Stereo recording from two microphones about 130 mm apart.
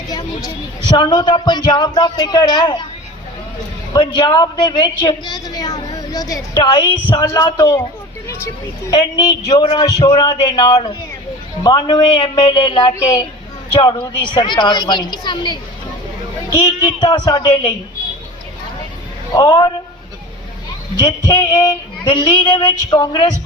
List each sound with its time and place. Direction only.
0.1 s speech: 30° left (ahead or behind)
3.9 s a woman's voice: 35° left (ahead or behind)
7.3 s a woman's voice: 20° left (ahead or behind)
8.9 s a woman's voice: 30° left (ahead or behind)
13.0 s a woman's voice: 25° left (ahead or behind)
14.3 s speech: 35° left (ahead or behind)
19.3 s a woman's voice: 30° left (ahead or behind)
21.2 s a woman's voice: 25° left (ahead or behind)
22.0 s speech: 40° left (ahead or behind)
22.9 s a woman's voice: 30° left (ahead or behind)